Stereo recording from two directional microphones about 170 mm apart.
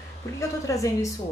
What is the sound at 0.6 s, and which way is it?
Speech, 20° left (ahead or behind).